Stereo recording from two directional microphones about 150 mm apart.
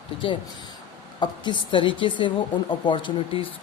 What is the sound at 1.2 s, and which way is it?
Speech, 30° left (ahead or behind).